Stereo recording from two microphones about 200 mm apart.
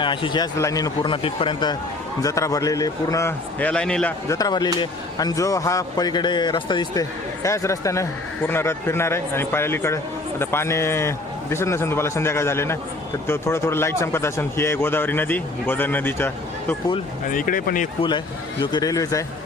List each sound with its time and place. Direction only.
0.0 s a man's voice: 25° left (ahead or behind); by 4.1 s 5° left (ahead or behind)
4.3 s a man's voice: 20° left (ahead or behind)
17.2 s speech: 45° left (ahead or behind)
18.6 s a man's voice: 20° left (ahead or behind)